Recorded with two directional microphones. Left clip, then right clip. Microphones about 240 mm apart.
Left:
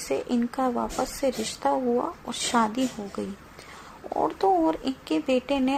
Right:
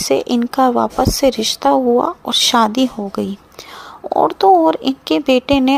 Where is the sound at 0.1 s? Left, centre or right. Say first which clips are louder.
Right 10 dB; right.